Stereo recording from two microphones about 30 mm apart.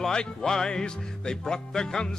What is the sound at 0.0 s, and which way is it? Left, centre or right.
Music, left.